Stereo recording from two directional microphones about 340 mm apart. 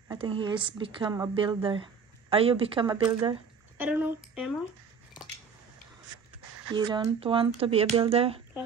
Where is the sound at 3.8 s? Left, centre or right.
Centre.